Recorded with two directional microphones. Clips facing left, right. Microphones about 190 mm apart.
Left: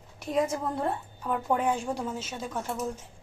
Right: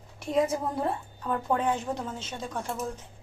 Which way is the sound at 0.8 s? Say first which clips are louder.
Even; 10° left (ahead or behind).